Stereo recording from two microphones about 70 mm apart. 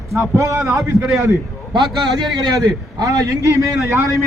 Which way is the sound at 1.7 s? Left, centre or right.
Right.